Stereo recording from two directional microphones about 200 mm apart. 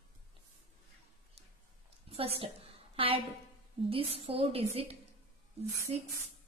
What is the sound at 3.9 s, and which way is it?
A woman's voice, 30° right (ahead or behind).